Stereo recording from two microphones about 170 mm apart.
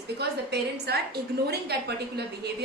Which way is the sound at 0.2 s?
75° right (ahead or behind).